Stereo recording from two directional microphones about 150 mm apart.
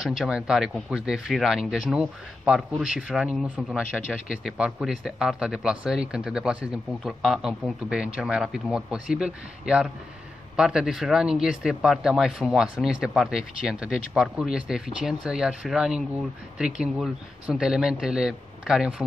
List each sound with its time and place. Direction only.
0.0 s speech: centre (ahead or behind)